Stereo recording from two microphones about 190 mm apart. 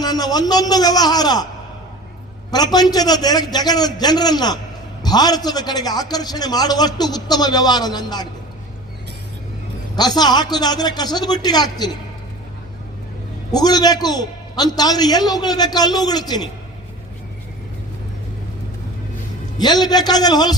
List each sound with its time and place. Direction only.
0.0 s a man's voice: 20° left (ahead or behind)
2.5 s a man's voice: 20° left (ahead or behind)
9.9 s a man's voice: 20° left (ahead or behind)
13.5 s a man's voice: 20° left (ahead or behind)
19.5 s a man's voice: 20° left (ahead or behind)